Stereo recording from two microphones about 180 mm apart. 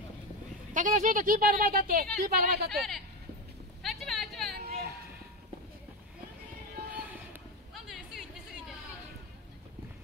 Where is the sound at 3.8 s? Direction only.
Centre (ahead or behind).